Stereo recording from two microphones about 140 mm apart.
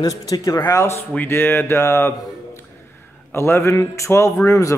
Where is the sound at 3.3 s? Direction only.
20° left (ahead or behind).